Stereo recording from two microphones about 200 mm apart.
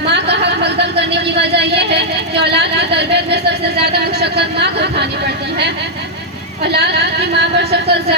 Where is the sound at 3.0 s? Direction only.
55° right (ahead or behind).